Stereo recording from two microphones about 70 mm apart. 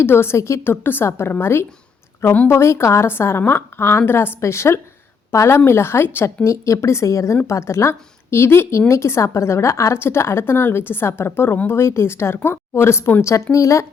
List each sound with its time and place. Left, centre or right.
0.0 s a woman's voice: left
2.2 s speech: left
2.5 s a woman's voice: left
13.2 s a woman's voice: left